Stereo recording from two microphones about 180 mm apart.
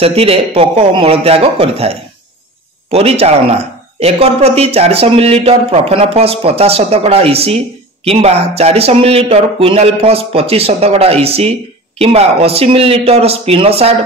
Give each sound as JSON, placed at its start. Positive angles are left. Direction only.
{"t": 0.0, "sound": "speech", "side_deg": -35}